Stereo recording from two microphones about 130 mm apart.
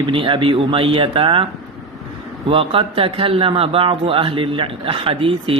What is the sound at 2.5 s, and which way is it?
A man's voice, 45° right (ahead or behind).